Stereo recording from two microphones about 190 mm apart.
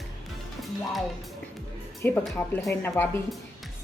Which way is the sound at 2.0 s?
10° left (ahead or behind).